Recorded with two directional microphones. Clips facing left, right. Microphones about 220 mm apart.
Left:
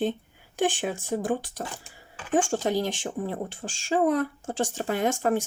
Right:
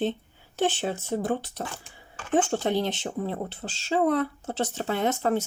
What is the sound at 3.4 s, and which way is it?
Speech, 15° left (ahead or behind).